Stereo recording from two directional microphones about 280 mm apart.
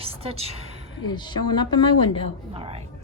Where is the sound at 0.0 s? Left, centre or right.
Right.